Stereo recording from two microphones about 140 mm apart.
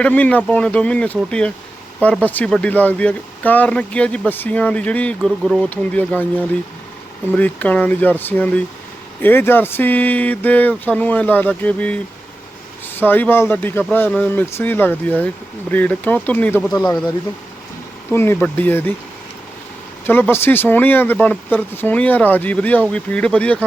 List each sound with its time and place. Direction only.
0.0 s speech: 10° left (ahead or behind)
18.1 s speech: 15° left (ahead or behind)
20.1 s speech: 15° left (ahead or behind)